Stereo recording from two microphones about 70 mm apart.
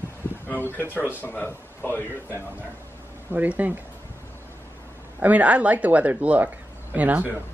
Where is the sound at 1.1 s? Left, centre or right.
Left.